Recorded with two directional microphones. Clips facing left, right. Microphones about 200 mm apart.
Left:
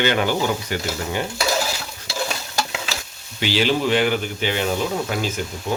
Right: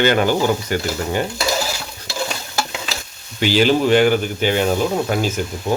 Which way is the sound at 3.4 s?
45° right (ahead or behind).